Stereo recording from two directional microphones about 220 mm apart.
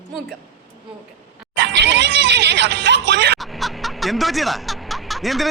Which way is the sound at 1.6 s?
50° right (ahead or behind).